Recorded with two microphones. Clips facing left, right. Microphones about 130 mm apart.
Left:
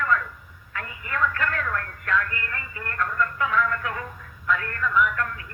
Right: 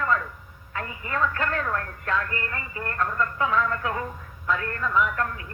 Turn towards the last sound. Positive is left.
turn(degrees=-30)  # may be behind; listen again after turning